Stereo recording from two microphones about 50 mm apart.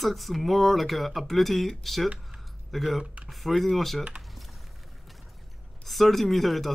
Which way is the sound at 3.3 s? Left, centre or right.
Centre.